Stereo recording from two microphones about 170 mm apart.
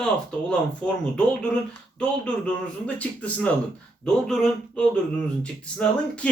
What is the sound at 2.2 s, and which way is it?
A man's voice, 5° left (ahead or behind).